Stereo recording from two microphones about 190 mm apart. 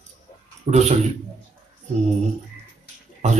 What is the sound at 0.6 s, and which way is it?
Speech, 35° right (ahead or behind).